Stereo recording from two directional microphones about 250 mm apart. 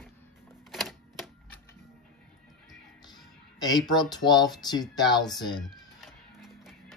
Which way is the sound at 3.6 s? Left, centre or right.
Centre.